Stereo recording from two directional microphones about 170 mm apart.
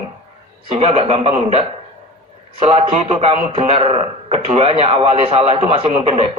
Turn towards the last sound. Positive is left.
turn(degrees=-35)  # may be behind; listen again after turning